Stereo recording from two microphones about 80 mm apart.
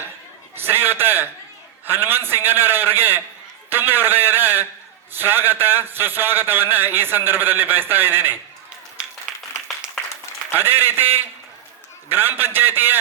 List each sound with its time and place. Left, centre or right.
0.5 s a sound: right
1.9 s a man's voice: right
9.3 s clapping: centre
10.5 s a man's voice: right